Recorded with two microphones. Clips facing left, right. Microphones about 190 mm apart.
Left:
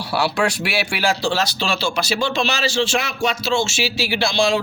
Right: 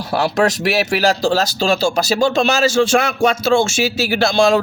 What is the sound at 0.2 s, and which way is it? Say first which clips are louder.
Speech: right 4 dB; 40° right (ahead or behind).